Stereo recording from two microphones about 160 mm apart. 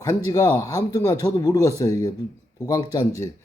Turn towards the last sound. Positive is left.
turn(degrees=20)  # may be behind; listen again after turning